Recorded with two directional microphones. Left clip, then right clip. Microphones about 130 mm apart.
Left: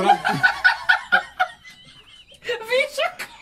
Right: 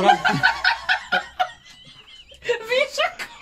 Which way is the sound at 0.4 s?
25° right (ahead or behind).